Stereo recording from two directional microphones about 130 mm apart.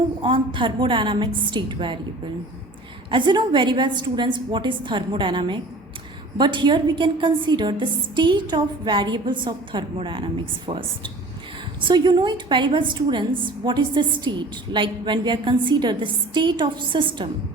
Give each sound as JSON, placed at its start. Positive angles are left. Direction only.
{"t": 0.2, "sound": "a woman's voice", "side_deg": -40}
{"t": 3.1, "sound": "a woman's voice", "side_deg": -40}